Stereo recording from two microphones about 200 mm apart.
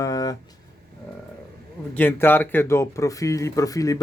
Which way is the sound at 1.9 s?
10° left (ahead or behind).